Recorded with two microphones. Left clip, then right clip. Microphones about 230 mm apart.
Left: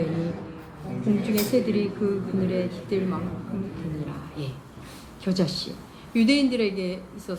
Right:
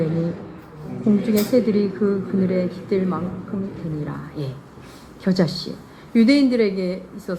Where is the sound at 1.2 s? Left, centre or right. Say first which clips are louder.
Right 5 dB; right.